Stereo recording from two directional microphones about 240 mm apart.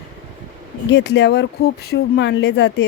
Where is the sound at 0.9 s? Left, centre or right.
Left.